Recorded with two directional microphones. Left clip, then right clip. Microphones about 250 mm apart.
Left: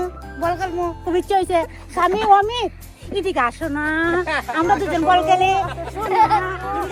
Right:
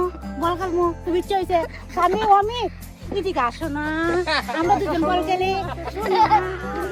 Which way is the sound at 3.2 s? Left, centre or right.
Left.